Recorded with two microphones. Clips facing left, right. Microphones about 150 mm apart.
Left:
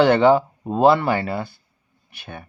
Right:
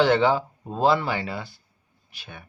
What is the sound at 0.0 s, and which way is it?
Speech, 60° left (ahead or behind).